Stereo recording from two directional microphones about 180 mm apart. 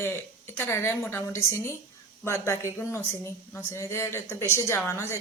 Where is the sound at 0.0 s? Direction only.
15° left (ahead or behind).